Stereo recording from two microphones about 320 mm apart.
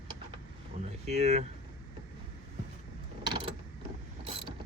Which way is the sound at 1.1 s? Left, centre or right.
Right.